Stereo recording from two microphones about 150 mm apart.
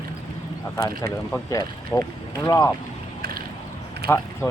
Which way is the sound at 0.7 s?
20° left (ahead or behind).